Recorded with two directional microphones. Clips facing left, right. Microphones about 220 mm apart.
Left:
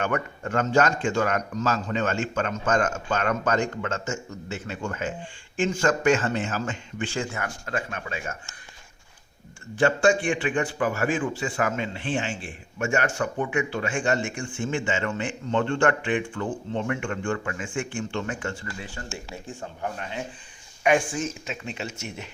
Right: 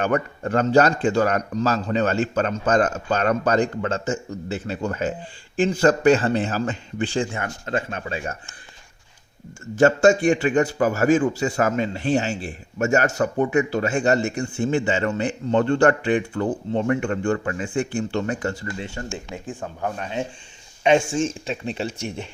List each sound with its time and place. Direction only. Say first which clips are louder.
0.0 s a man's voice: right 5 dB; 35° right (ahead or behind)
9.7 s a man's voice: right 5 dB; 40° right (ahead or behind)
19.0 s speech: right 5 dB; 20° right (ahead or behind)
20.8 s a man's voice: right 4 dB; 25° right (ahead or behind)